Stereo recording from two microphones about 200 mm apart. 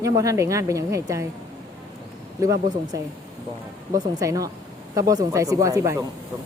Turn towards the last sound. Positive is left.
turn(degrees=-15)  # may be behind; listen again after turning